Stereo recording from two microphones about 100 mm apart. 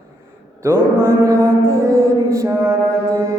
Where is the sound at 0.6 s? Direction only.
30° right (ahead or behind).